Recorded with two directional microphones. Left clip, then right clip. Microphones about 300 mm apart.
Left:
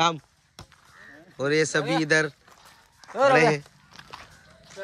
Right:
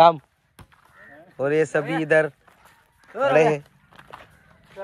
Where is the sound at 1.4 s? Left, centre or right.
Centre.